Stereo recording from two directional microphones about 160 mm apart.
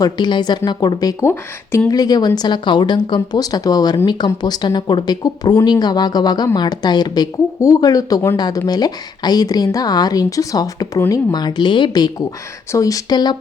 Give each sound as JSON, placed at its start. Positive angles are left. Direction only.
{"t": 0.0, "sound": "speech", "side_deg": 30}